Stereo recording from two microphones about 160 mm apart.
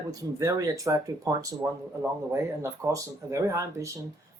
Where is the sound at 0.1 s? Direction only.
20° right (ahead or behind).